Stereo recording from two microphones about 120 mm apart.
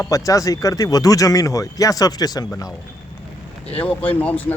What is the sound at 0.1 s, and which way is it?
Speech, 30° left (ahead or behind).